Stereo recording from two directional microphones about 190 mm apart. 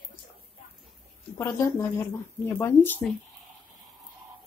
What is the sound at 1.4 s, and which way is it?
Speech, 15° left (ahead or behind).